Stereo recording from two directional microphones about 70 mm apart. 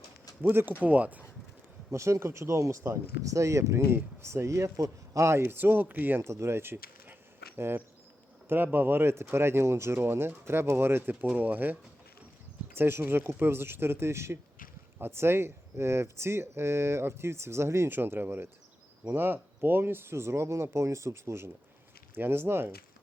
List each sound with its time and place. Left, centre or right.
0.4 s speech: right
1.9 s speech: right
3.8 s speech: right
6.2 s speech: right